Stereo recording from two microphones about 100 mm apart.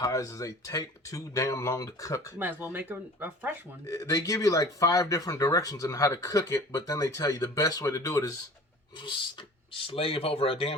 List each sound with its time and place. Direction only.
0.0 s speech: 35° left (ahead or behind)
2.4 s speech: 20° right (ahead or behind)
3.8 s speech: 35° left (ahead or behind)
9.7 s speech: 65° left (ahead or behind)